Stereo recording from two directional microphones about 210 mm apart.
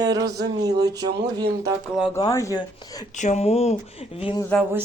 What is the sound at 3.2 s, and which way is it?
Speech, 35° left (ahead or behind).